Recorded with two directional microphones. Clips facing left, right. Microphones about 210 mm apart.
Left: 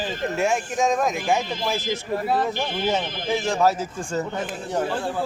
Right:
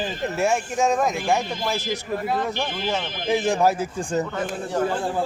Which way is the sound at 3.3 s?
15° right (ahead or behind).